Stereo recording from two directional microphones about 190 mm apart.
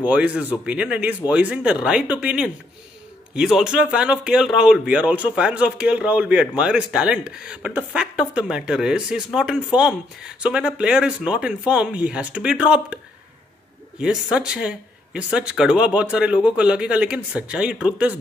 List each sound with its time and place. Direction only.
0.0 s a man's voice: 5° right (ahead or behind)
14.0 s speech: 5° right (ahead or behind)